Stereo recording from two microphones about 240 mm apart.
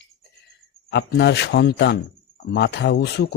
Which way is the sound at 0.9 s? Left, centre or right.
Left.